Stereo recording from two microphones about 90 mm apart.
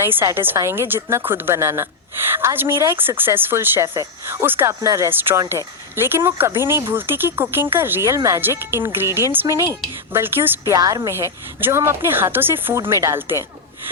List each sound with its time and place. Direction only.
0.0 s speech: 25° right (ahead or behind)
4.6 s speech: 35° right (ahead or behind)
5.1 s speech: 25° right (ahead or behind)
8.0 s speech: 35° right (ahead or behind)
8.4 s speech: 25° right (ahead or behind)
10.7 s speech: 40° right (ahead or behind)
11.1 s speech: 30° right (ahead or behind)